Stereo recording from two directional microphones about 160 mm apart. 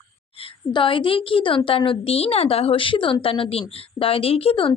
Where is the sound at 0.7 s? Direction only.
30° left (ahead or behind).